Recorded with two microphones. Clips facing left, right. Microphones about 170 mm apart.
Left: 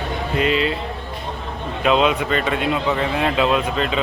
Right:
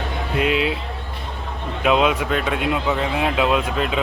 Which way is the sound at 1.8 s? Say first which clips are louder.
Left 1 dB; 5° right (ahead or behind).